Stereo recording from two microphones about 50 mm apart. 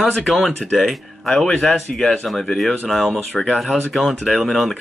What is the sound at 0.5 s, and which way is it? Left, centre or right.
Speech, centre.